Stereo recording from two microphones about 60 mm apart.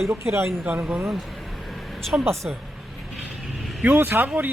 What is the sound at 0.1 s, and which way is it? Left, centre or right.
Speech, right.